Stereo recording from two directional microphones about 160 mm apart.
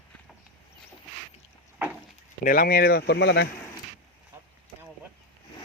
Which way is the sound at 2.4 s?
65° left (ahead or behind).